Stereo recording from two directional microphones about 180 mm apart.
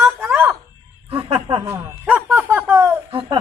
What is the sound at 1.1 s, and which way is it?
Speech, 30° right (ahead or behind).